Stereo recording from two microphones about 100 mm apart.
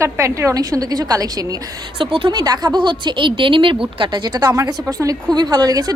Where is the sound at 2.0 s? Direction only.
60° right (ahead or behind).